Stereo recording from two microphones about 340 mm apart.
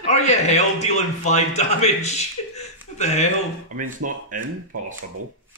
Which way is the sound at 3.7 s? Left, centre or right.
Right.